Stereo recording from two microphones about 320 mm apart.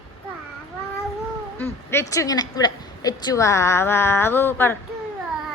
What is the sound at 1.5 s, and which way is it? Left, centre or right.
A woman's voice, centre.